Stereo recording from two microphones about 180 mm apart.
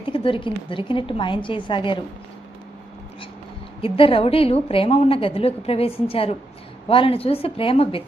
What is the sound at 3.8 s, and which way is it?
A woman's voice, 30° left (ahead or behind).